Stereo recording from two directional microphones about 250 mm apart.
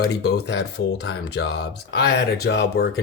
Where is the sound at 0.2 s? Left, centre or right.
Left.